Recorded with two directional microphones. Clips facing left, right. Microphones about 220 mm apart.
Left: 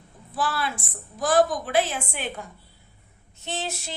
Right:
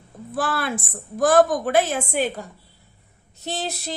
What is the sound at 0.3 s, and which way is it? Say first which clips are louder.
A woman's voice: right 3 dB; 50° right (ahead or behind).